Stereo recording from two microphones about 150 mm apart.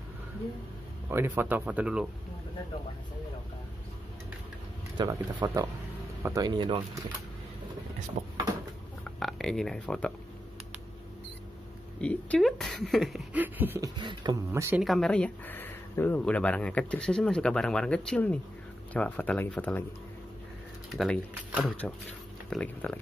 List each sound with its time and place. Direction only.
1.1 s speech: 15° right (ahead or behind)
4.9 s speech: 30° right (ahead or behind)
8.2 s cupboard open or close: 45° right (ahead or behind)
9.0 s speech: centre (ahead or behind)
12.0 s speech: 10° left (ahead or behind)
13.4 s speech: 15° right (ahead or behind)
13.8 s speech: 30° right (ahead or behind)
14.5 s speech: 20° right (ahead or behind)
14.8 s speech: centre (ahead or behind)
20.9 s speech: centre (ahead or behind)